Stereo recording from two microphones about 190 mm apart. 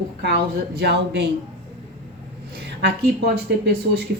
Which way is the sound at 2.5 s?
60° right (ahead or behind).